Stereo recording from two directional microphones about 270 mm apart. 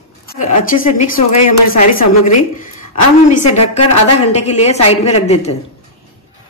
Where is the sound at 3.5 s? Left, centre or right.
Left.